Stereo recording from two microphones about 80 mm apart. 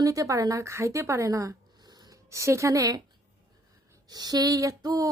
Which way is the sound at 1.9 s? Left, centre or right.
Right.